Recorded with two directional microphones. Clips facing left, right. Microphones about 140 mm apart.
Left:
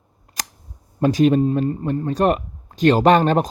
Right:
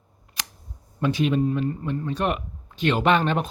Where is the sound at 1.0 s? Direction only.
40° left (ahead or behind).